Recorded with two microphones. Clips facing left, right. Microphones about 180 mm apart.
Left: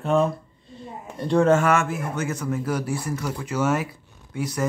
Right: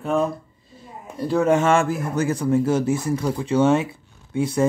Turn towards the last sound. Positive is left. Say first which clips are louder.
# right 6 dB
turn(degrees=-25)  # may be behind; listen again after turning